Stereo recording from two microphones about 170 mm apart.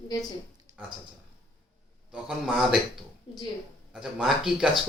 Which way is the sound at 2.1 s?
5° right (ahead or behind).